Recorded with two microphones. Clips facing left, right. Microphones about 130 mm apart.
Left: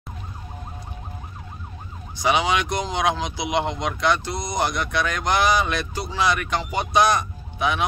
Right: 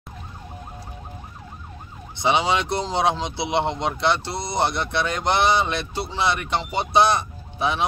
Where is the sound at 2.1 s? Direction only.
25° right (ahead or behind).